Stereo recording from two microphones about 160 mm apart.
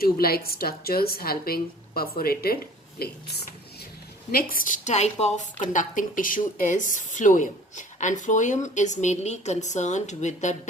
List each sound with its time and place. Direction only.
0.0 s a woman's voice: 70° left (ahead or behind)
4.3 s a woman's voice: 65° left (ahead or behind); by 10.5 s 45° left (ahead or behind)